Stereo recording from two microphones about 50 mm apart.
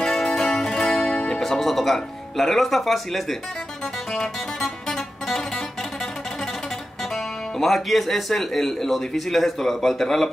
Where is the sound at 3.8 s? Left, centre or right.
Centre.